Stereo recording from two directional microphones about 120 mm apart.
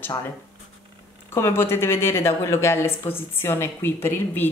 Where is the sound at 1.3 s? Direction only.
20° left (ahead or behind).